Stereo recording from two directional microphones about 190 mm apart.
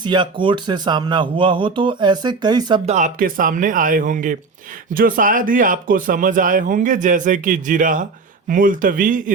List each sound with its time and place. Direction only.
0.0 s speech: 25° right (ahead or behind)
2.9 s speech: 45° right (ahead or behind)